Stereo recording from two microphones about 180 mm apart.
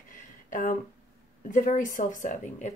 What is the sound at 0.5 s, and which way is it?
Speech, 45° left (ahead or behind).